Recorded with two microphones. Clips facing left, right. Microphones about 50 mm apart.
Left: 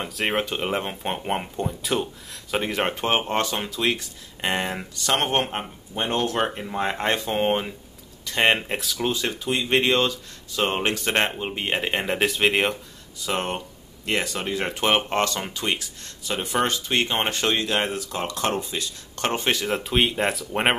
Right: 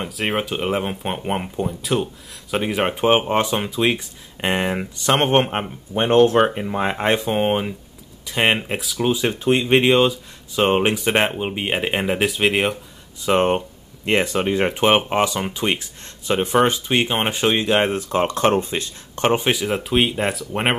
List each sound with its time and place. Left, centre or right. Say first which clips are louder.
0.0 s speech: right 2 dB; centre
9.4 s speech: right 7 dB; right
9.7 s speech: right 4 dB; centre
13.2 s speech: right 9 dB; right
19.1 s speech: right 6 dB; centre